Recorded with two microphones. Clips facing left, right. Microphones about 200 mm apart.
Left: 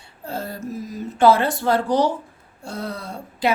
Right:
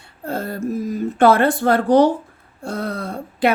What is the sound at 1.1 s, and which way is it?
Speech, 55° right (ahead or behind).